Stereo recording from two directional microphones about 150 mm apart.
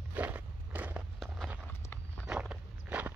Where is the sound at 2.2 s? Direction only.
5° right (ahead or behind).